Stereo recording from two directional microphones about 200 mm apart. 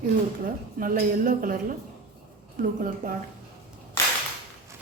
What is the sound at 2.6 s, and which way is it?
Speech, 45° right (ahead or behind).